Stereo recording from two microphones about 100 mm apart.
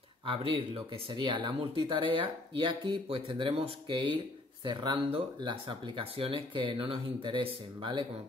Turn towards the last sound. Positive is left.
turn(degrees=-55)  # may be behind; listen again after turning